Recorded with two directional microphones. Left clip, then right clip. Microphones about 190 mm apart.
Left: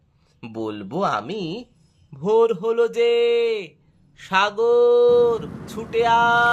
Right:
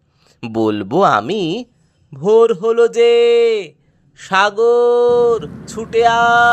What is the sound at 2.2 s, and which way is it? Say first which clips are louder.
Speech: right 7 dB; 30° right (ahead or behind).